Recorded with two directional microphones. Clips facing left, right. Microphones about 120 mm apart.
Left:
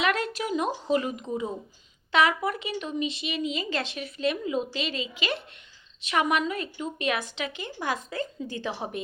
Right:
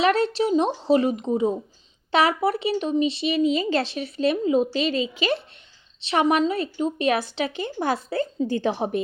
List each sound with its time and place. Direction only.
0.0 s speech: 30° right (ahead or behind)